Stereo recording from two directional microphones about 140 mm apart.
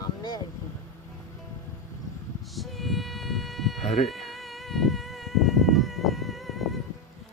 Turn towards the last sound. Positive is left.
turn(degrees=0)  # may be behind; listen again after turning